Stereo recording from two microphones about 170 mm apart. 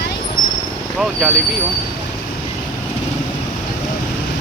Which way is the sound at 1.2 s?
Centre (ahead or behind).